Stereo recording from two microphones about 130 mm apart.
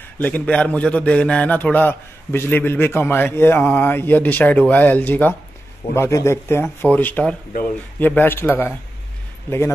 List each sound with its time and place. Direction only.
0.2 s a man's voice: 10° left (ahead or behind)